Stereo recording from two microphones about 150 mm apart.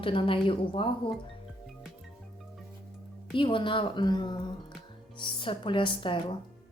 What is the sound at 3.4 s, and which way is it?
A woman's voice, 35° left (ahead or behind).